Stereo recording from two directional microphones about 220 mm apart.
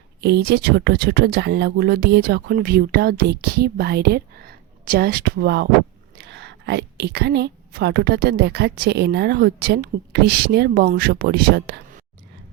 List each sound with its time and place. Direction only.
0.2 s a woman's voice: 50° right (ahead or behind)